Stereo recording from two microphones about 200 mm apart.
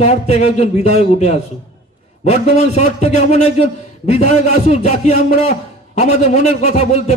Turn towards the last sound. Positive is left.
turn(degrees=35)  # may be behind; listen again after turning